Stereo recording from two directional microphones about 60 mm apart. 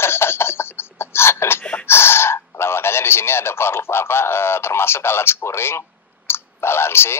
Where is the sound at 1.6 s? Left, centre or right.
Left.